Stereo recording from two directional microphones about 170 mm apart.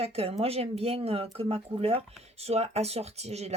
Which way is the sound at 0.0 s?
35° right (ahead or behind).